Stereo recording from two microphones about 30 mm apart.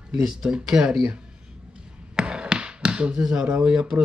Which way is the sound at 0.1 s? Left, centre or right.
Centre.